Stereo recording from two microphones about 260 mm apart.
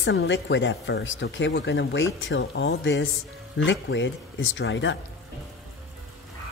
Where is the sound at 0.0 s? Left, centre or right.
Left.